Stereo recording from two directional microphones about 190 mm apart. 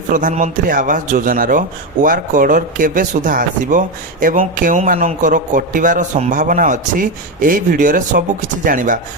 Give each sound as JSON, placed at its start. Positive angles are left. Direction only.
{"t": 0.1, "sound": "a man's voice", "side_deg": -45}